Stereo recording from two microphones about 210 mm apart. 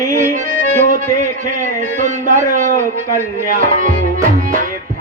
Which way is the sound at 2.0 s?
35° right (ahead or behind).